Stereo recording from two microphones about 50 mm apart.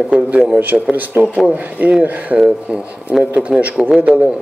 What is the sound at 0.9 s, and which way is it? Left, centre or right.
Speech, right.